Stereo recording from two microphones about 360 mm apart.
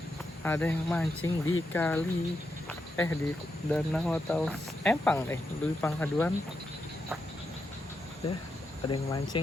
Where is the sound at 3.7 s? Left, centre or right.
Centre.